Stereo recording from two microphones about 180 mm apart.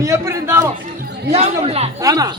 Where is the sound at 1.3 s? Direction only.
35° right (ahead or behind).